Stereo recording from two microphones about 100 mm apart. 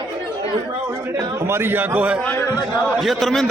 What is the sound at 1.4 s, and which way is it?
Speech, 25° right (ahead or behind).